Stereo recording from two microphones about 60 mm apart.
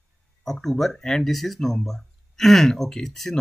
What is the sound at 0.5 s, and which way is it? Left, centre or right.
Speech, centre.